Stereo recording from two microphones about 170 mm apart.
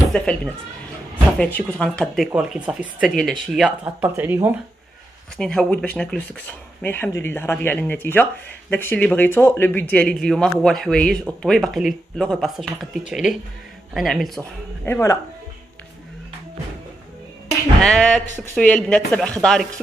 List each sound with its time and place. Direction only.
0.1 s speech: 5° left (ahead or behind)
1.4 s speech: 5° left (ahead or behind); by 4.6 s 10° right (ahead or behind)
5.4 s speech: 5° left (ahead or behind)
14.9 s speech: 15° left (ahead or behind)
17.8 s speech: 5° left (ahead or behind)